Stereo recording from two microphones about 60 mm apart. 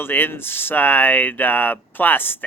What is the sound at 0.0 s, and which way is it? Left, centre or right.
Speech, left.